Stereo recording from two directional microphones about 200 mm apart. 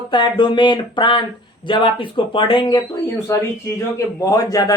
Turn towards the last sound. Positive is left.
turn(degrees=20)  # may be behind; listen again after turning